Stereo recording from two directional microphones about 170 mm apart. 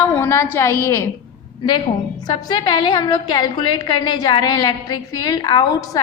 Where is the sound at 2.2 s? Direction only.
25° left (ahead or behind).